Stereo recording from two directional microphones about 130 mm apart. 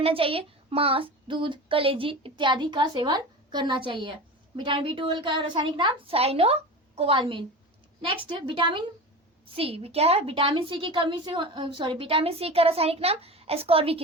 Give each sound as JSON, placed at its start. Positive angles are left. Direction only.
{"t": 0.0, "sound": "a woman's voice", "side_deg": -45}